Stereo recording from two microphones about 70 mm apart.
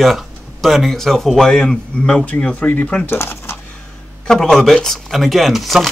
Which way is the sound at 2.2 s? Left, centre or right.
Left.